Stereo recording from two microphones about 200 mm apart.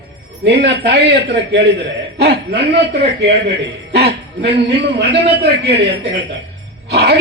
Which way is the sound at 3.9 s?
55° right (ahead or behind).